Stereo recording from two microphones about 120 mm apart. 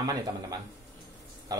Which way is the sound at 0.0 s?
30° right (ahead or behind).